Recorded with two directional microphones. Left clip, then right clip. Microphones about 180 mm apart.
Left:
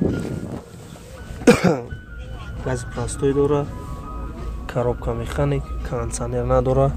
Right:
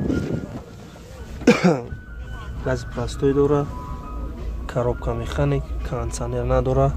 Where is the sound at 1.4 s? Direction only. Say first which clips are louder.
Left 2 dB; 15° left (ahead or behind).